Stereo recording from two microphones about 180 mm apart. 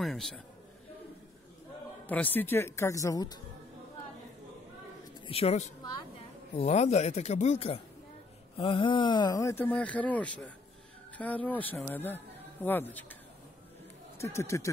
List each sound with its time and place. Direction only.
0.0 s a man's voice: centre (ahead or behind)
2.0 s speech: 10° left (ahead or behind)
5.2 s a woman's voice: 35° left (ahead or behind); by 14.7 s 15° left (ahead or behind)